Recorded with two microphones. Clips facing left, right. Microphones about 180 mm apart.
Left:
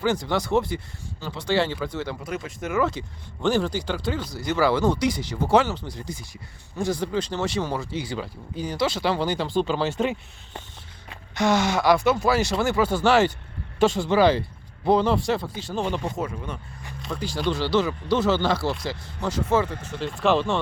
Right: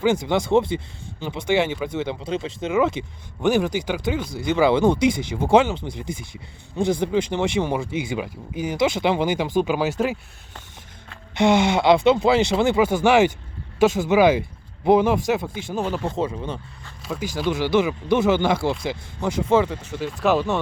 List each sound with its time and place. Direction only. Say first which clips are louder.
0.0 s speech: right 4 dB; 20° right (ahead or behind)
11.3 s speech: right 4 dB; 25° right (ahead or behind); by 16.0 s 10° right (ahead or behind)
16.1 s speech: right 5 dB; 30° right (ahead or behind)
17.0 s speech: right 2 dB; 5° right (ahead or behind)